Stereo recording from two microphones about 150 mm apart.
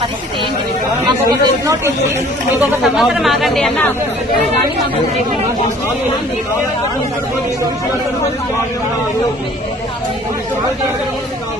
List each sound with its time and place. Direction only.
1.0 s speech: 25° right (ahead or behind)
2.8 s speech: centre (ahead or behind)